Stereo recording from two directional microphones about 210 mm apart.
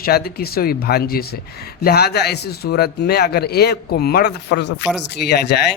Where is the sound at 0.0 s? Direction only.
50° left (ahead or behind).